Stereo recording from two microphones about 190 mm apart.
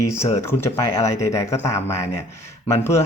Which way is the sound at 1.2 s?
15° left (ahead or behind).